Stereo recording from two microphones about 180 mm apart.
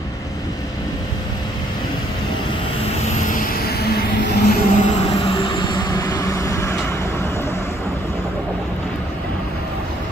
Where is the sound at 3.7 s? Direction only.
60° left (ahead or behind).